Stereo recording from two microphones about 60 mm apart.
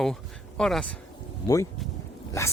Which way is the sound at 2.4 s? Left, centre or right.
Left.